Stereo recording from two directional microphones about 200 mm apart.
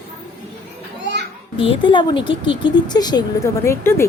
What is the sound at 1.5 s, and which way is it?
A woman's voice, 25° left (ahead or behind).